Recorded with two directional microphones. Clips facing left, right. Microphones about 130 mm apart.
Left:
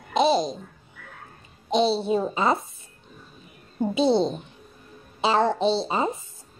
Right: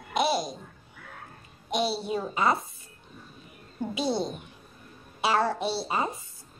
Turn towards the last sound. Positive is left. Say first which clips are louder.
# left 6 dB
turn(degrees=20)  # may be behind; listen again after turning